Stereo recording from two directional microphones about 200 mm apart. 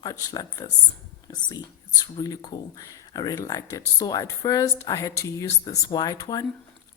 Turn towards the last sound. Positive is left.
turn(degrees=20)  # may be behind; listen again after turning